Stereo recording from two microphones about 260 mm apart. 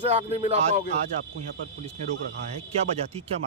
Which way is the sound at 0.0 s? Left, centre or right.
Right.